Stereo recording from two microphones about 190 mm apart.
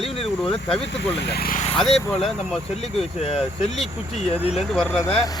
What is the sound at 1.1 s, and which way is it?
Speech, 60° left (ahead or behind).